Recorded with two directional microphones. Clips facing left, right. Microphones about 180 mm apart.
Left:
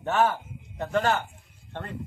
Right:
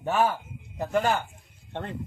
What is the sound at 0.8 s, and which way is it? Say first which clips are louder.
Speech: even; 10° right (ahead or behind).